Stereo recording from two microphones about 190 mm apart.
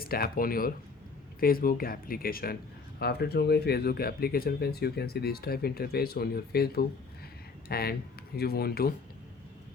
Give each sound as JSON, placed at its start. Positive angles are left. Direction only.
{"t": 0.0, "sound": "speech", "side_deg": 50}